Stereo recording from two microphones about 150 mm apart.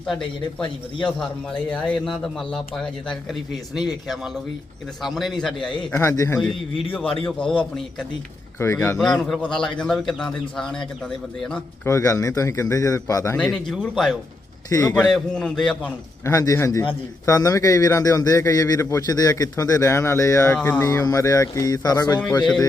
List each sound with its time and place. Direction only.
0.0 s a man's voice: centre (ahead or behind)
5.0 s a man's voice: centre (ahead or behind)
5.9 s a man's voice: 15° left (ahead or behind)
6.4 s a man's voice: centre (ahead or behind)
8.5 s speech: 20° left (ahead or behind)
9.0 s a man's voice: centre (ahead or behind)
11.9 s a man's voice: 20° left (ahead or behind)
13.3 s a man's voice: 5° left (ahead or behind)
14.7 s a man's voice: 25° left (ahead or behind)
15.1 s a man's voice: 5° left (ahead or behind)
16.2 s a man's voice: 20° left (ahead or behind)
20.8 s a man's voice: 25° left (ahead or behind)